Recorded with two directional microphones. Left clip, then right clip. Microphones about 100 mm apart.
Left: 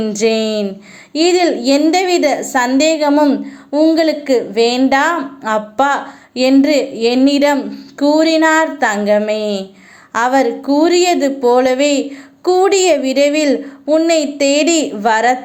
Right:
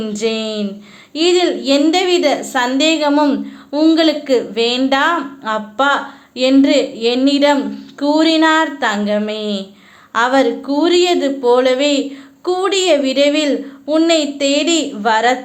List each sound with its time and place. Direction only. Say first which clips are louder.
0.1 s speech: left 4 dB; 40° left (ahead or behind)
3.2 s speech: left 2 dB; 10° left (ahead or behind)
5.5 s speech: left 1 dB; 40° left (ahead or behind)
13.8 s speech: left 2 dB; 20° left (ahead or behind)
14.1 s speech: left 1 dB; 35° left (ahead or behind)